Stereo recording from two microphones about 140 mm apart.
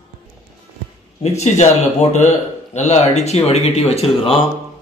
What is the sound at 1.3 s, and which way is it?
Speech, 55° left (ahead or behind).